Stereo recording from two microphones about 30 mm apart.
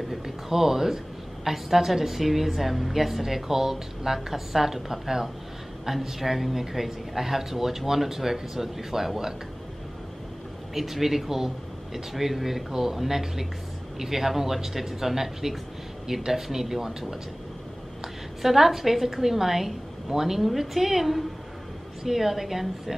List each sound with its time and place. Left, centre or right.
0.1 s a woman's voice: centre
10.7 s a woman's voice: centre
18.0 s a woman's voice: centre